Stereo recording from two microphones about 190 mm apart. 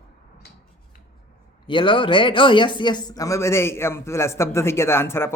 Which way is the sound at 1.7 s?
25° left (ahead or behind).